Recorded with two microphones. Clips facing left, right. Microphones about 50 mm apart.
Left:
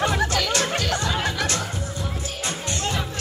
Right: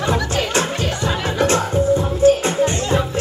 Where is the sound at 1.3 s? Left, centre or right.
Right.